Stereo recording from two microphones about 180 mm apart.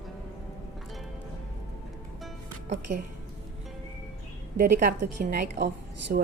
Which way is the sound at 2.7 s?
45° right (ahead or behind).